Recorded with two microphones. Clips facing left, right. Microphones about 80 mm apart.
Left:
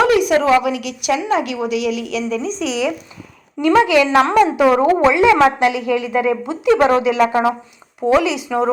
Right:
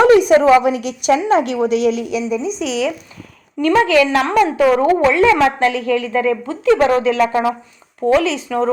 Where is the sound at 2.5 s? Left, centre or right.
Centre.